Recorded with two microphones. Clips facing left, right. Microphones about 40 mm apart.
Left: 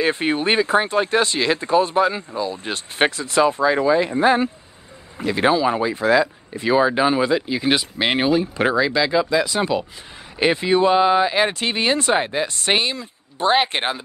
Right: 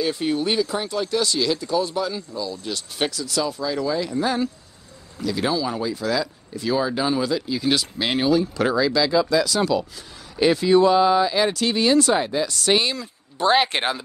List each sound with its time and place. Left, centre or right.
0.0 s speech: left